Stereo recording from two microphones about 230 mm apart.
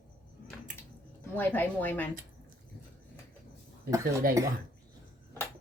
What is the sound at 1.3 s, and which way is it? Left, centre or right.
Speech, centre.